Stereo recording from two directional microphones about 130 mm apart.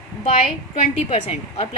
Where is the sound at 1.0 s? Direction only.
50° left (ahead or behind).